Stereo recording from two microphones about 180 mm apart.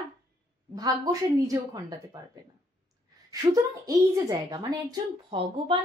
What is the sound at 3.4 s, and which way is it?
Speech, 20° right (ahead or behind).